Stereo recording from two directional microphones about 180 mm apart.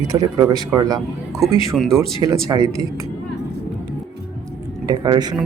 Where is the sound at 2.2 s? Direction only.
20° right (ahead or behind).